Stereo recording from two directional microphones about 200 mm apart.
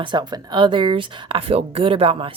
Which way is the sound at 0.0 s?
25° right (ahead or behind).